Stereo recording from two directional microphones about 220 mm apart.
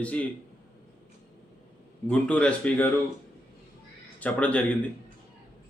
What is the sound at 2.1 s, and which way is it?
Speech, 5° left (ahead or behind).